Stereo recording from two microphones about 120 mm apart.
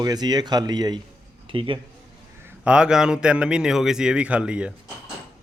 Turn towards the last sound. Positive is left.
turn(degrees=-10)  # may be behind; listen again after turning